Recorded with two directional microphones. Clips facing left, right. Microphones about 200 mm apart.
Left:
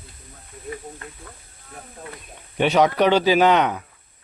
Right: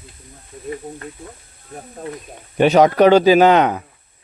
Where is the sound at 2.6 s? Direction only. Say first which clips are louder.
Right 6 dB; 45° right (ahead or behind).